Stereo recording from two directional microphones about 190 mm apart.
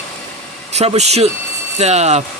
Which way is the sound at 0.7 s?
35° right (ahead or behind).